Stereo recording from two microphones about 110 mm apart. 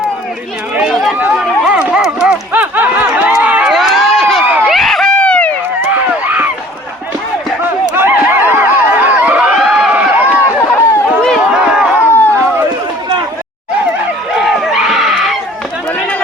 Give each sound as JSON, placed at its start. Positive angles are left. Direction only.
{"t": 1.6, "sound": "run", "side_deg": -10}
{"t": 3.4, "sound": "crowd", "side_deg": -10}
{"t": 3.7, "sound": "run", "side_deg": 0}
{"t": 4.4, "sound": "run", "side_deg": -15}
{"t": 4.7, "sound": "run", "side_deg": 0}
{"t": 5.8, "sound": "run", "side_deg": -15}
{"t": 7.9, "sound": "a sound", "side_deg": -20}
{"t": 9.6, "sound": "run", "side_deg": -5}
{"t": 10.4, "sound": "run", "side_deg": 20}
{"t": 11.1, "sound": "run", "side_deg": 5}
{"t": 11.9, "sound": "a sound", "side_deg": 20}
{"t": 14.4, "sound": "a sound", "side_deg": 0}